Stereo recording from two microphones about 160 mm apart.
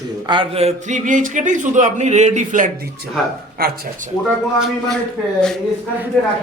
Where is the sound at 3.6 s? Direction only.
70° right (ahead or behind).